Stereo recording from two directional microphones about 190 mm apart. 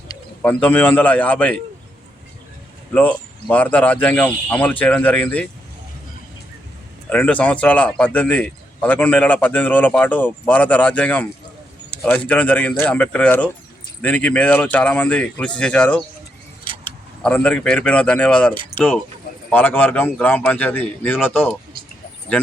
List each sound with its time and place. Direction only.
0.4 s speech: 10° left (ahead or behind)
2.9 s speech: 5° left (ahead or behind)
7.1 s speech: 5° left (ahead or behind)
18.7 s keys jangling: 60° right (ahead or behind)
19.5 s speech: 10° left (ahead or behind)